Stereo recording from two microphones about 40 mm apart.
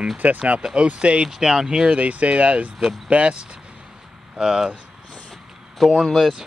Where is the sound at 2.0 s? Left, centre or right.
Right.